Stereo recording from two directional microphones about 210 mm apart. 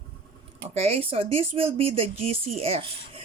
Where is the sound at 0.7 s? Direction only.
30° right (ahead or behind).